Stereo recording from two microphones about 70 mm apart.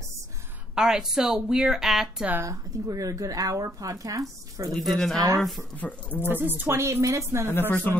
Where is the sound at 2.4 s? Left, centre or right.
Right.